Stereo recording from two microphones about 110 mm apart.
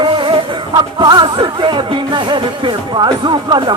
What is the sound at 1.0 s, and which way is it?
Music, 40° right (ahead or behind).